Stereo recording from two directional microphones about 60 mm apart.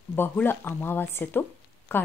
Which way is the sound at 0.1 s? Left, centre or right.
Left.